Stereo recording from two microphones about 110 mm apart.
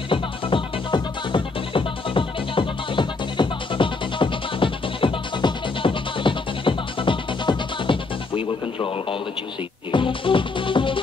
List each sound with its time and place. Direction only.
0.1 s music: 50° left (ahead or behind)